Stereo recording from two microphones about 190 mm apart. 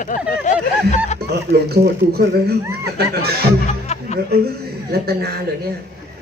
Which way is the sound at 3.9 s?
35° left (ahead or behind).